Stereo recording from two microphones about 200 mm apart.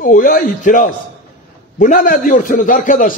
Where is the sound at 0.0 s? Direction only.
45° left (ahead or behind).